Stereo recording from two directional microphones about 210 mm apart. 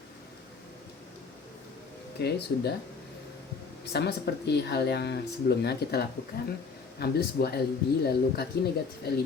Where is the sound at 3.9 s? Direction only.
50° left (ahead or behind).